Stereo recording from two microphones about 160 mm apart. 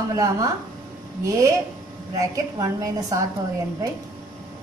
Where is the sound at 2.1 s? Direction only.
20° right (ahead or behind).